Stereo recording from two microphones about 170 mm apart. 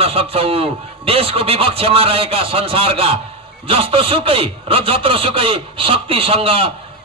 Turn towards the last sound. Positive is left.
turn(degrees=-35)  # may be behind; listen again after turning